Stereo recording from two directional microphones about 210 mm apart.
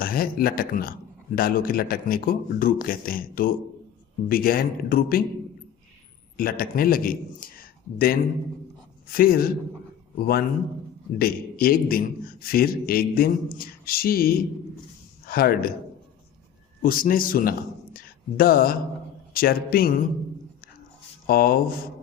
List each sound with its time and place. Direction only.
0.0 s a man's voice: 45° left (ahead or behind)
6.3 s a man's voice: 45° left (ahead or behind)
16.8 s a man's voice: 40° left (ahead or behind)
21.2 s a man's voice: 45° left (ahead or behind)